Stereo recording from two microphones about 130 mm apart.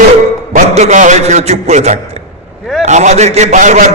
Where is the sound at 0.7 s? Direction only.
65° right (ahead or behind).